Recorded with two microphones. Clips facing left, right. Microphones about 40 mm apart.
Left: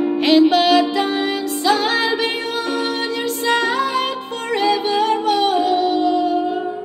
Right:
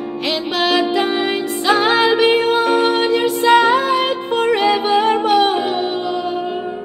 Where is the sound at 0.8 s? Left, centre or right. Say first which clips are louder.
Right 1 dB; right.